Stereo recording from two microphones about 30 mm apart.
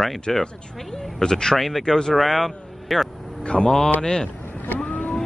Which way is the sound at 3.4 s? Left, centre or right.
Left.